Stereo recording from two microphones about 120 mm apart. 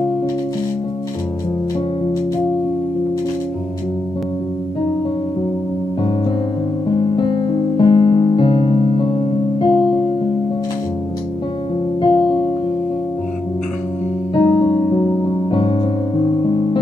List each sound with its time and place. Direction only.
7.0 s music: 40° left (ahead or behind)
12.0 s music: 45° left (ahead or behind)
14.3 s music: 45° left (ahead or behind)